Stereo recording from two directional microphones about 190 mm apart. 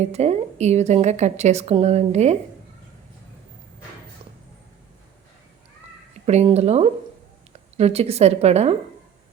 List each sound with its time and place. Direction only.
0.1 s a woman's voice: 35° right (ahead or behind)
6.2 s a woman's voice: 35° right (ahead or behind)